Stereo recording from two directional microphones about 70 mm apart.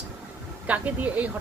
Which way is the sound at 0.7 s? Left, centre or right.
Right.